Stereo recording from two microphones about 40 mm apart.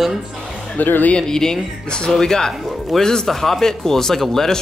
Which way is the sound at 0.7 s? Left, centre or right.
Left.